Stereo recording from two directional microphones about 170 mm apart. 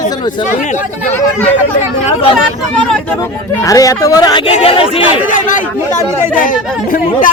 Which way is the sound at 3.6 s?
20° left (ahead or behind).